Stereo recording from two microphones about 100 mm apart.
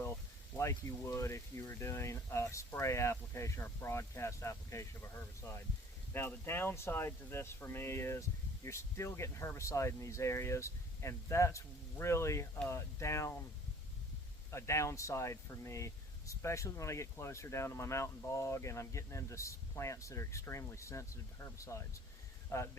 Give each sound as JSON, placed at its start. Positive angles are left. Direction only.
{"t": 0.5, "sound": "speech", "side_deg": 30}
{"t": 6.1, "sound": "speech", "side_deg": 25}
{"t": 14.5, "sound": "speech", "side_deg": 30}